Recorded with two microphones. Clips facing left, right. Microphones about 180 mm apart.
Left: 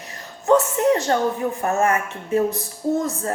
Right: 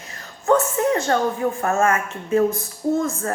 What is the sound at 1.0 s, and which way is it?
A woman's voice, 20° left (ahead or behind).